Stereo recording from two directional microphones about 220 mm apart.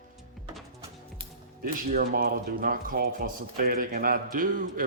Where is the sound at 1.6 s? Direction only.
40° right (ahead or behind).